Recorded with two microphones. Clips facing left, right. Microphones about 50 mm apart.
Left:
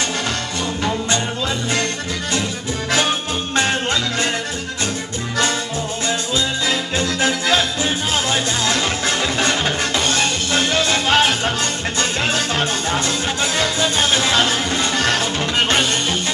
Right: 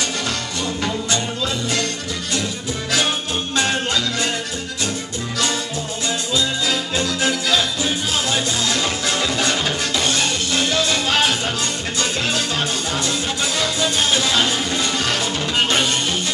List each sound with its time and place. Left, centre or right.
3.5 s music: left
6.0 s music: left